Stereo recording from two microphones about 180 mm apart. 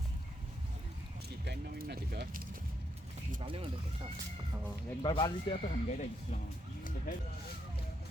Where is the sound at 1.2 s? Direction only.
60° right (ahead or behind).